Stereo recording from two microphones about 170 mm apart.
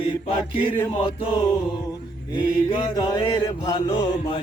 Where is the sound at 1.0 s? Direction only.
35° left (ahead or behind).